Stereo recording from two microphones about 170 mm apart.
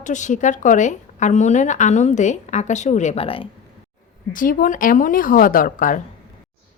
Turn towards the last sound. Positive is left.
turn(degrees=55)  # may be behind; listen again after turning